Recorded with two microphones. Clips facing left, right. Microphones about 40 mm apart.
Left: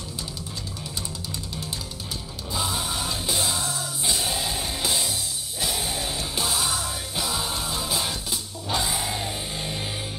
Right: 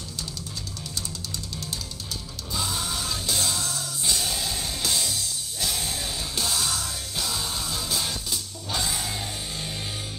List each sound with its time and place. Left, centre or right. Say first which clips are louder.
2.5 s music: left 2 dB; centre